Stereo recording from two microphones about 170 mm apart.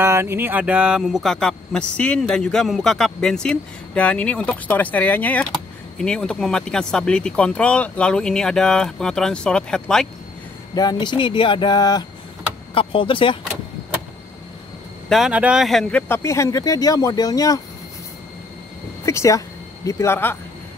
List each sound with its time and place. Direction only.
0.0 s speech: 15° right (ahead or behind); by 10.0 s 5° left (ahead or behind)
10.7 s speech: 25° left (ahead or behind)
15.0 s speech: centre (ahead or behind)
16.1 s speech: 15° left (ahead or behind)
19.0 s speech: 20° left (ahead or behind)